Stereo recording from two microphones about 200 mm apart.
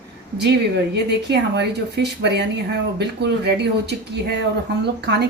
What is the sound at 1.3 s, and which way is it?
A woman's voice, 55° right (ahead or behind).